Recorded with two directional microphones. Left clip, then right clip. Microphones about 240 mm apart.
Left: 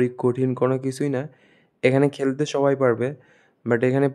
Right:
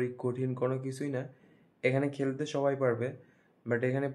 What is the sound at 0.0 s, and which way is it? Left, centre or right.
Speech, left.